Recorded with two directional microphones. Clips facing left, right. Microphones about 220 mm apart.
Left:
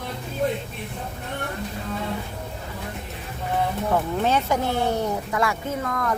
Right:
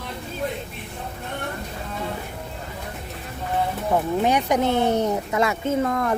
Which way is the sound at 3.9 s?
15° right (ahead or behind).